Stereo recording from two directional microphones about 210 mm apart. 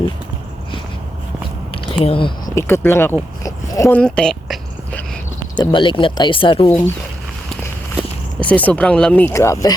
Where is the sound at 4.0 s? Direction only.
5° left (ahead or behind).